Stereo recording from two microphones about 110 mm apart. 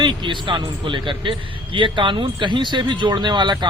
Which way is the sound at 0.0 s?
45° right (ahead or behind).